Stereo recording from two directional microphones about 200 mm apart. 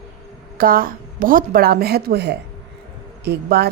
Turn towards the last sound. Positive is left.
turn(degrees=-55)  # may be behind; listen again after turning